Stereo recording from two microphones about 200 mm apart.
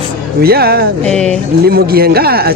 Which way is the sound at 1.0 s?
5° left (ahead or behind).